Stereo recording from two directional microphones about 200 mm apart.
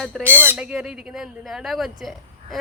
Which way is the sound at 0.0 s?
Centre (ahead or behind).